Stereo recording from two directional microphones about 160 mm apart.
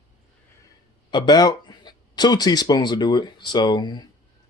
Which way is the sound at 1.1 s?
25° left (ahead or behind).